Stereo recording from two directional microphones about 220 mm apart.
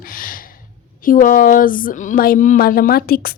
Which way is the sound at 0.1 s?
40° left (ahead or behind).